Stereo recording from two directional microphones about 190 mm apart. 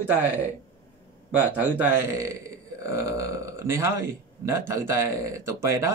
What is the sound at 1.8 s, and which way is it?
Speech, 15° right (ahead or behind).